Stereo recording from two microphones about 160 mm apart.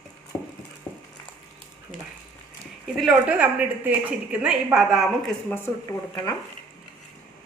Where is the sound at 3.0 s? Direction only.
5° right (ahead or behind).